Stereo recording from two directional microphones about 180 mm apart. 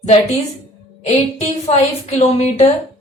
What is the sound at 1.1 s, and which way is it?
A woman's voice, 40° left (ahead or behind).